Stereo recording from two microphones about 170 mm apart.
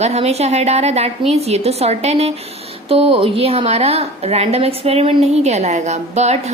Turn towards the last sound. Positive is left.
turn(degrees=-40)  # may be behind; listen again after turning